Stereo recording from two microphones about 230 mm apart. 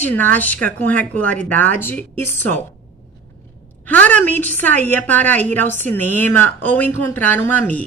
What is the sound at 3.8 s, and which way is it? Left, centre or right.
A woman's voice, centre.